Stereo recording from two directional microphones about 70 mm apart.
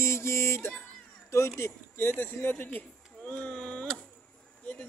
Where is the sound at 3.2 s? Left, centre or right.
Centre.